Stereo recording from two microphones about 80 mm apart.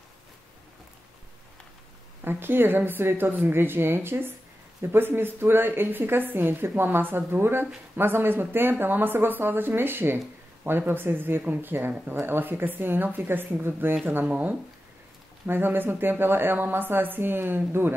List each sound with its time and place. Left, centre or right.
2.2 s speech: right